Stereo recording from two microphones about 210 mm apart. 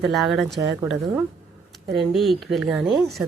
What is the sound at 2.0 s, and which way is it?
Speech, centre (ahead or behind).